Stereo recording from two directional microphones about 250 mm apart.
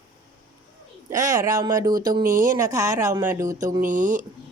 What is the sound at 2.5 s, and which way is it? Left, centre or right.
Speech, centre.